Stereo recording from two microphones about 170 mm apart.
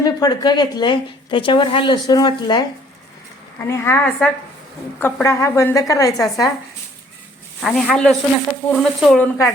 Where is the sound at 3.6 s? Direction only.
15° left (ahead or behind).